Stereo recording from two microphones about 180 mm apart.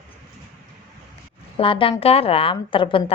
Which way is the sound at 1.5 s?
30° left (ahead or behind).